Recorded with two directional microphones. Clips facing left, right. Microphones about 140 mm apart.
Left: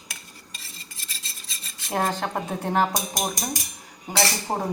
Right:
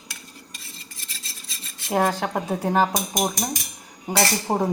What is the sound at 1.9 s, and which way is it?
Speech, 10° right (ahead or behind).